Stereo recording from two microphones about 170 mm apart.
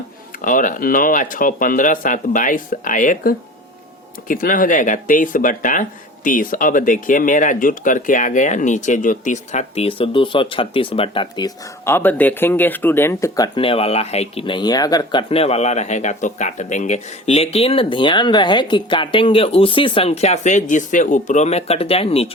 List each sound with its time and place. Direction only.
0.4 s speech: 50° left (ahead or behind); by 13.5 s 20° left (ahead or behind)
13.6 s speech: 35° left (ahead or behind)
15.3 s speech: 35° left (ahead or behind)